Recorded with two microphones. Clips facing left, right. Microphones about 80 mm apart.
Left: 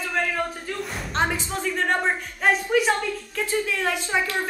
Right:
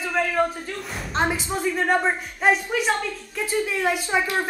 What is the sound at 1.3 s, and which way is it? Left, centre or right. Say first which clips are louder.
A woman's voice: right 2 dB; centre.